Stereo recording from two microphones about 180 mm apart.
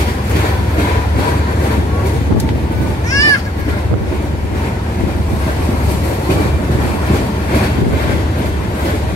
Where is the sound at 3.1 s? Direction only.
20° left (ahead or behind).